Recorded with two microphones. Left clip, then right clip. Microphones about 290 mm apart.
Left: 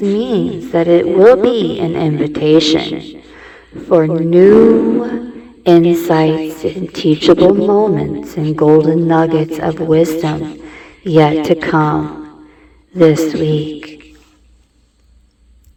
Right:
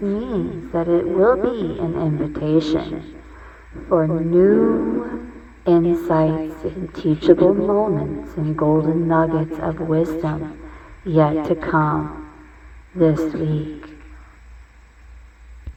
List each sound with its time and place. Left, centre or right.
0.0 s a woman's voice: left
13.5 s speech: left